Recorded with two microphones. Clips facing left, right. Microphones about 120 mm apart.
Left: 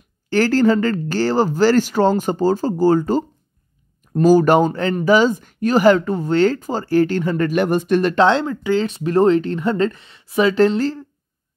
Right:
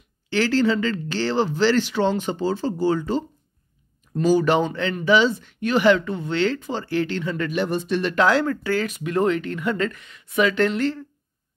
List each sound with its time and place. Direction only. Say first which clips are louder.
0.3 s speech: left 5 dB; 45° left (ahead or behind)
8.1 s speech: even; 30° left (ahead or behind)
8.8 s speech: left 8 dB; 30° left (ahead or behind)